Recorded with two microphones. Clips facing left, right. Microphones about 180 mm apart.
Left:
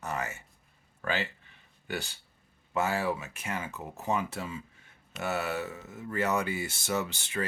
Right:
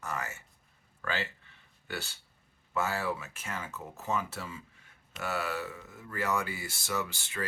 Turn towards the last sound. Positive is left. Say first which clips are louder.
# left 3 dB
turn(degrees=20)  # may be behind; listen again after turning